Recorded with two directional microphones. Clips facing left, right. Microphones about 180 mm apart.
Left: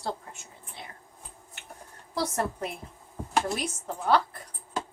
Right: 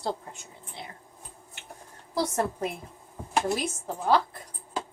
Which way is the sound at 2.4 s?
10° right (ahead or behind).